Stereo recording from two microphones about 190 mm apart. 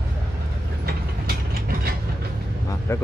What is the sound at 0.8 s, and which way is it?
Ratchet, 50° right (ahead or behind).